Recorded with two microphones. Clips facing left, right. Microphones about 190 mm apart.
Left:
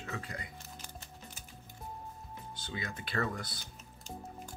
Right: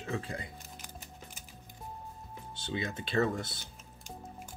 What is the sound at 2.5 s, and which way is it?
Speech, 25° right (ahead or behind).